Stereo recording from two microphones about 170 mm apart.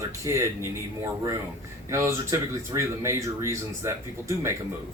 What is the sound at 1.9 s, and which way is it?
Speech, 15° right (ahead or behind).